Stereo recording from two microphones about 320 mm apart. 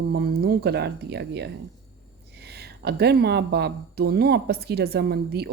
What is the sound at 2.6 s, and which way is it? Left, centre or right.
Speech, right.